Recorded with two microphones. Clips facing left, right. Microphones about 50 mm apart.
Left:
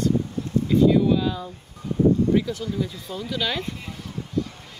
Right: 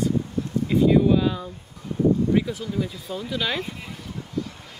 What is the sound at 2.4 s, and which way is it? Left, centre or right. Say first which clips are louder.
Speech: even; centre.